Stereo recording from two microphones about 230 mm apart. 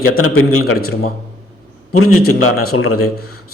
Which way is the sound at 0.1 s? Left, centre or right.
Left.